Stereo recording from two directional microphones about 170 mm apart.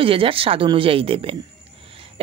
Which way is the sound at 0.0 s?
30° right (ahead or behind).